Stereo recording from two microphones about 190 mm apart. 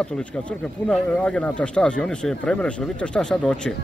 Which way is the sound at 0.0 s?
5° left (ahead or behind).